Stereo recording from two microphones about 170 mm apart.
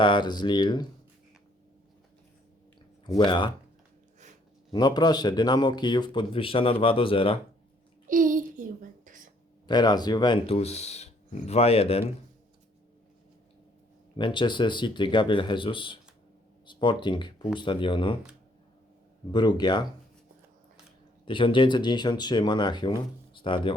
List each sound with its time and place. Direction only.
0.0 s speech: 25° left (ahead or behind)
3.2 s speech: 30° left (ahead or behind)
4.7 s speech: 25° left (ahead or behind)
8.0 s a sound: 50° right (ahead or behind)
9.6 s speech: 25° left (ahead or behind)
14.2 s speech: 25° left (ahead or behind)
19.3 s speech: 25° left (ahead or behind)
21.2 s speech: 30° left (ahead or behind)